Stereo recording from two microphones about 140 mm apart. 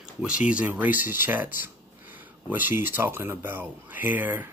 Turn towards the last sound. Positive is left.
turn(degrees=-15)  # may be behind; listen again after turning